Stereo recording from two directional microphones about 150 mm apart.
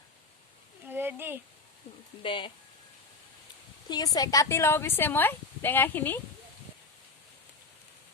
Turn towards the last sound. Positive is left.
turn(degrees=10)  # may be behind; listen again after turning